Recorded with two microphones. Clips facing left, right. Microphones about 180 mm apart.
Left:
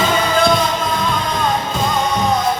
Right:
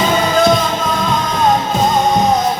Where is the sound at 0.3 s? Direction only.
40° right (ahead or behind).